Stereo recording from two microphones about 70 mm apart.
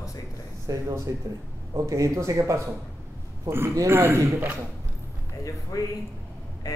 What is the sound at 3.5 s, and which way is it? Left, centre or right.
A man's voice, right.